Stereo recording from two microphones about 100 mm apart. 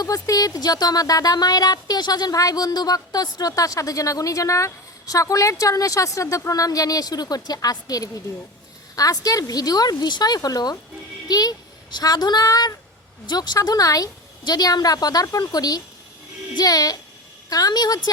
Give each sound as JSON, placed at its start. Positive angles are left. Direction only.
{"t": 0.0, "sound": "speech", "side_deg": 35}